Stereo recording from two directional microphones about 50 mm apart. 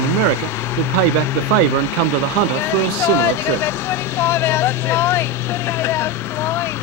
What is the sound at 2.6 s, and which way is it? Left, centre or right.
Speech, left.